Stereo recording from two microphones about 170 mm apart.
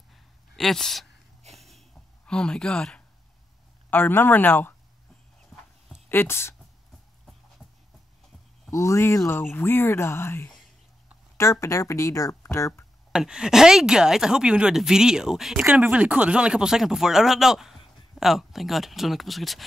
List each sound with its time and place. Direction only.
0.1 s a sound: centre (ahead or behind)
3.9 s speech: 10° left (ahead or behind)
5.5 s horse: 5° left (ahead or behind)
6.0 s speech: 15° left (ahead or behind)
8.7 s speech: 15° left (ahead or behind)
13.1 s speech: 5° right (ahead or behind)